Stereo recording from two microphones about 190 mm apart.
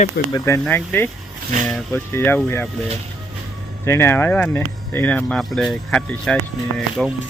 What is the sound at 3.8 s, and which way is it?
Speech, 15° left (ahead or behind).